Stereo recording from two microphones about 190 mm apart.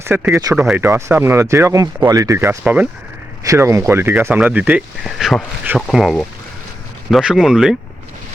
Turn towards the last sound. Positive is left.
turn(degrees=0)  # may be behind; listen again after turning